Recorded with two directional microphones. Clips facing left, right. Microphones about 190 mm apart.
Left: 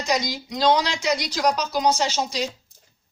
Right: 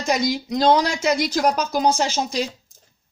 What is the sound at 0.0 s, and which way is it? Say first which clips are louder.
A woman's voice: right 3 dB; 50° right (ahead or behind).